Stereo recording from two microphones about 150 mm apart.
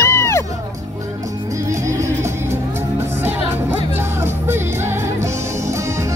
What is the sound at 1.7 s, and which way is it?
Music, 20° right (ahead or behind).